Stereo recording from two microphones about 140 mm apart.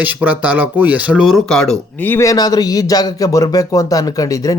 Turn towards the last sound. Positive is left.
turn(degrees=25)  # may be behind; listen again after turning